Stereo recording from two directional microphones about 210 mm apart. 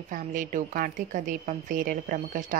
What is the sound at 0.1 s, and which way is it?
Speech, 40° right (ahead or behind).